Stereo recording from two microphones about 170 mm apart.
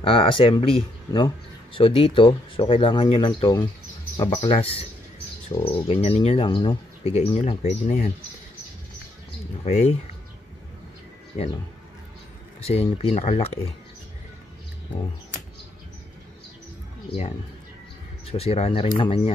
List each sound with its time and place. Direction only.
0.0 s speech: 35° left (ahead or behind)
9.7 s speech: 40° left (ahead or behind)
12.9 s speech: 40° left (ahead or behind)
18.2 s speech: 35° left (ahead or behind)